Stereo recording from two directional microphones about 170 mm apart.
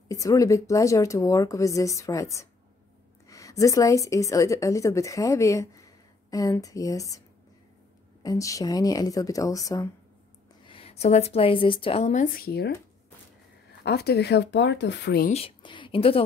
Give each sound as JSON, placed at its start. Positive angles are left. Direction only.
{"t": 0.1, "sound": "a woman's voice", "side_deg": 20}
{"t": 10.7, "sound": "a woman's voice", "side_deg": 35}
{"t": 13.8, "sound": "speech", "side_deg": 75}
{"t": 15.2, "sound": "a woman's voice", "side_deg": 35}